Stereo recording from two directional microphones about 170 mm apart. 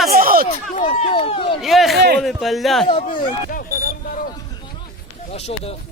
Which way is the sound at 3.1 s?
55° left (ahead or behind).